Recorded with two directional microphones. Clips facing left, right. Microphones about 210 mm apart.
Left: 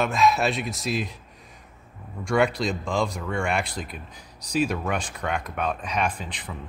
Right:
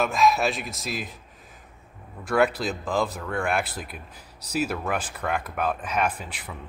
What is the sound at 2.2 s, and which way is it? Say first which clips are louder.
Speech: even; 5° right (ahead or behind).